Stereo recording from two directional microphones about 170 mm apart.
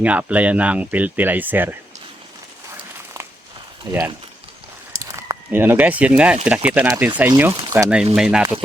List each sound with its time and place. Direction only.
0.0 s speech: 10° right (ahead or behind)
3.9 s speech: 25° right (ahead or behind)
5.0 s speech: 20° right (ahead or behind)